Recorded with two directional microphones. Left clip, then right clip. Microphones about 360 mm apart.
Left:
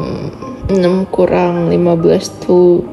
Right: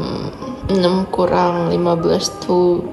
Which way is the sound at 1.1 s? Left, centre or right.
Right.